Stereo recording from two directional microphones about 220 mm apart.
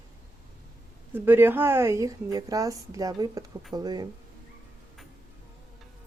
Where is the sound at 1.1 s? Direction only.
10° right (ahead or behind).